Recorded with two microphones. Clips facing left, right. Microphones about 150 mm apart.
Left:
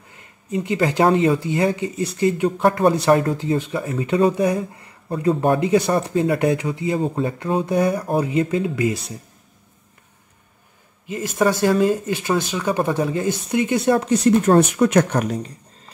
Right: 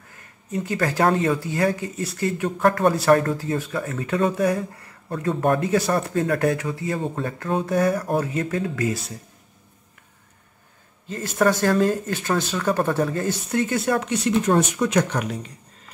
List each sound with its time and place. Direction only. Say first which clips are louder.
0.1 s speech: left 4 dB; 20° left (ahead or behind)
5.6 s speech: left 3 dB; 20° left (ahead or behind)
11.1 s speech: left 1 dB; 10° left (ahead or behind)
13.9 s speech: left 5 dB; 40° left (ahead or behind)